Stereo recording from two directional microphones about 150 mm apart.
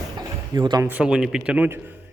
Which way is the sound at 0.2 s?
25° right (ahead or behind).